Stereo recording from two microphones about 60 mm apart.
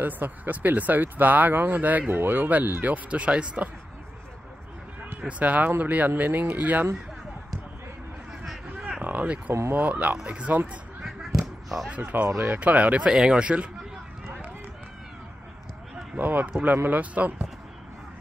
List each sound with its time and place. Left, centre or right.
0.0 s speech: right
5.4 s speech: right
9.0 s speech: right
9.5 s speech: right
9.8 s speech: right
11.0 s a sound: centre
12.1 s speech: right
12.5 s speech: right
16.2 s speech: right